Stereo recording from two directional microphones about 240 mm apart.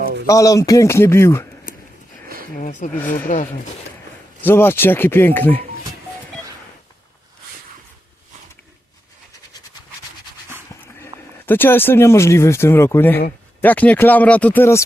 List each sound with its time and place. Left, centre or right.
0.3 s speech: centre
2.6 s speech: left
4.4 s speech: centre
11.0 s speech: centre